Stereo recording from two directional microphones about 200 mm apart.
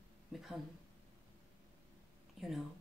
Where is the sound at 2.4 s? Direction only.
Centre (ahead or behind).